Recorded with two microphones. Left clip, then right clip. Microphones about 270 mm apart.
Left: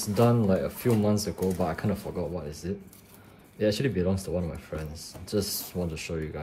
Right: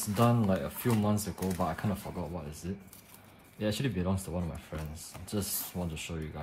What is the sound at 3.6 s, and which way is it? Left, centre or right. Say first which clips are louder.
Speech: left 8 dB; centre.